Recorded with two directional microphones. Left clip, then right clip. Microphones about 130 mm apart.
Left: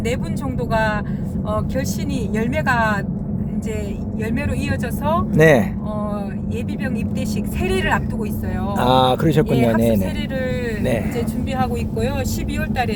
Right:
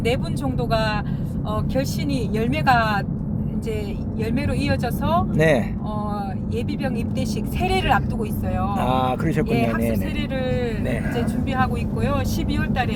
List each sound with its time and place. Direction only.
2.3 s speech: 15° left (ahead or behind)
4.7 s speech: 15° left (ahead or behind)
5.3 s speech: 25° left (ahead or behind)
7.6 s speech: 10° left (ahead or behind)
8.9 s speech: 50° left (ahead or behind)
11.5 s speech: 25° left (ahead or behind)